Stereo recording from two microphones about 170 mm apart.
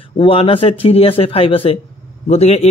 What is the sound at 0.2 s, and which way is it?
Speech, 30° left (ahead or behind).